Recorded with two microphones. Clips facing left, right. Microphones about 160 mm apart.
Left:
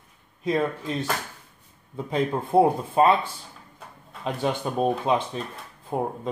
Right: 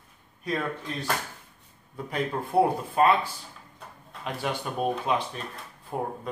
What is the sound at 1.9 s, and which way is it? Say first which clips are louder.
Speech: left 4 dB; 25° left (ahead or behind).